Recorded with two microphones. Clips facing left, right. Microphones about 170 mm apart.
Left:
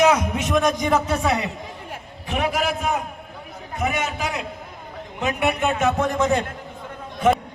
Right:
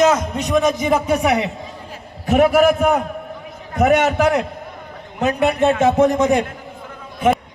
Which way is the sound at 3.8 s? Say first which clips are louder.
Right 11 dB; 70° right (ahead or behind).